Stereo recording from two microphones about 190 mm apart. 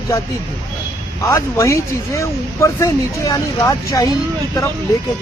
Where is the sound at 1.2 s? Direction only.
15° left (ahead or behind).